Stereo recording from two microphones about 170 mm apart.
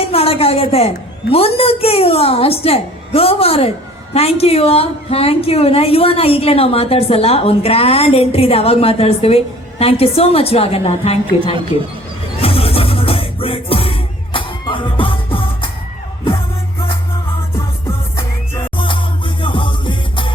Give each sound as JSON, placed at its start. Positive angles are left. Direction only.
{"t": 0.1, "sound": "a sound", "side_deg": 35}
{"t": 1.3, "sound": "a woman's voice", "side_deg": 35}
{"t": 12.4, "sound": "music", "side_deg": 35}
{"t": 18.8, "sound": "music", "side_deg": 30}